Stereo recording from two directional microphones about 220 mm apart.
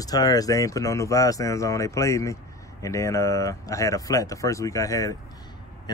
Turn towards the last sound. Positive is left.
turn(degrees=15)  # may be behind; listen again after turning